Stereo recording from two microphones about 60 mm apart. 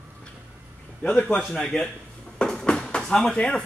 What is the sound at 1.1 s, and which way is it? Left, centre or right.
Speech, centre.